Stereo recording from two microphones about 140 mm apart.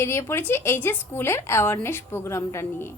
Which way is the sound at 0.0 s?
20° left (ahead or behind).